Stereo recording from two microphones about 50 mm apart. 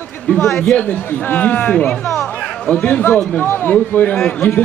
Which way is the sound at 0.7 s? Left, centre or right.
Left.